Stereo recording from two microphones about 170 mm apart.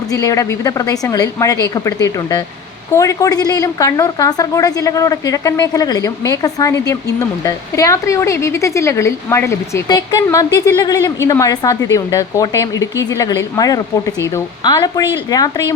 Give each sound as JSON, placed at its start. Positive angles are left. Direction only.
{"t": 0.1, "sound": "a woman's voice", "side_deg": 20}
{"t": 2.9, "sound": "a woman's voice", "side_deg": 20}